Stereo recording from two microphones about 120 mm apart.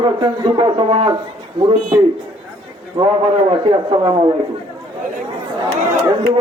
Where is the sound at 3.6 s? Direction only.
50° right (ahead or behind).